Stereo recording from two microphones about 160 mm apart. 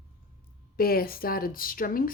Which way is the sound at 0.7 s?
70° left (ahead or behind).